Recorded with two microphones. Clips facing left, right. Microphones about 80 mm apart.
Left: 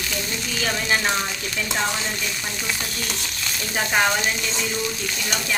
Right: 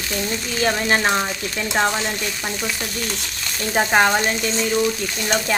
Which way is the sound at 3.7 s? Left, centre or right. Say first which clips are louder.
Right 5 dB; right.